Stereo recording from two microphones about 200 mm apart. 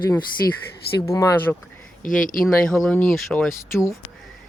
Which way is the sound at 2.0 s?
40° left (ahead or behind).